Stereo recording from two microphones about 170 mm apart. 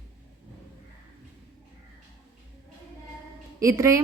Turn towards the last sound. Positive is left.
turn(degrees=-15)  # may be behind; listen again after turning